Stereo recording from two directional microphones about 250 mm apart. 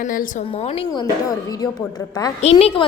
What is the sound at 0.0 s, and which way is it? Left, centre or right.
A woman's voice, left.